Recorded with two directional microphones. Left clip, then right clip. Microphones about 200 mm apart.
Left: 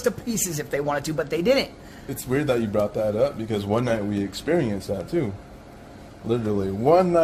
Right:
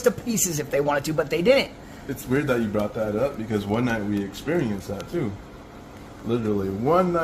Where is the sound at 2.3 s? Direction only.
40° left (ahead or behind); by 5.3 s 55° left (ahead or behind).